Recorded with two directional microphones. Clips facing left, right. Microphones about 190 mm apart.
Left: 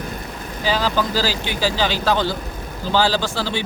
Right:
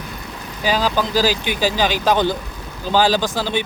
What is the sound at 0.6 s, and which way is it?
Speech, 15° right (ahead or behind).